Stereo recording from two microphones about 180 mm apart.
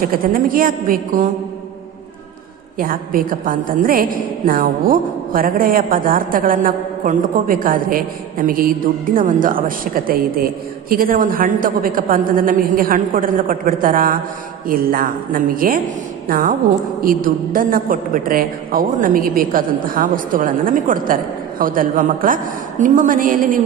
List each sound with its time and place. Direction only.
0.0 s a woman's voice: 50° right (ahead or behind)
2.8 s a woman's voice: 50° right (ahead or behind)